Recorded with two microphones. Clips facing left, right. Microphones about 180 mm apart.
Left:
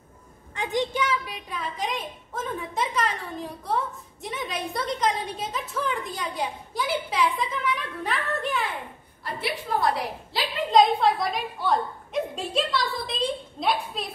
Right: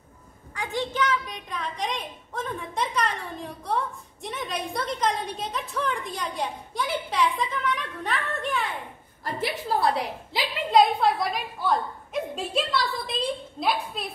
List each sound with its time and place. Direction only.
0.6 s a woman's voice: 15° left (ahead or behind); by 8.7 s centre (ahead or behind)
9.7 s a woman's voice: 30° right (ahead or behind)
10.3 s a woman's voice: 10° right (ahead or behind)